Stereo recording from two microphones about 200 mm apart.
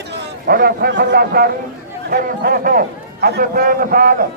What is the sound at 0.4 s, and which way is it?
A man's voice, 50° right (ahead or behind).